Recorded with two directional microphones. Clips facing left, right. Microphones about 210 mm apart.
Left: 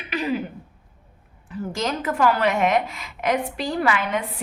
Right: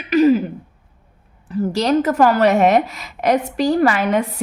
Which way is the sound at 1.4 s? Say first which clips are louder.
Right 9 dB; 35° right (ahead or behind).